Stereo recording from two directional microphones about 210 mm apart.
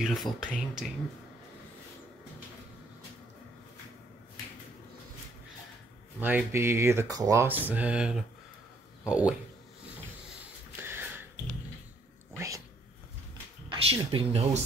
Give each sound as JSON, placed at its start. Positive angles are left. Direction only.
{"t": 0.0, "sound": "speech", "side_deg": 0}
{"t": 6.2, "sound": "speech", "side_deg": -10}
{"t": 10.8, "sound": "a sound", "side_deg": -10}
{"t": 12.4, "sound": "speech", "side_deg": -15}
{"t": 13.7, "sound": "speech", "side_deg": -25}